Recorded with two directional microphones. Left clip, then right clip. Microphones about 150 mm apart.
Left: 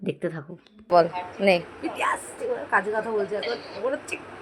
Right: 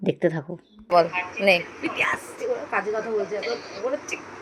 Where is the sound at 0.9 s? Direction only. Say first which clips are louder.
Even; 25° left (ahead or behind).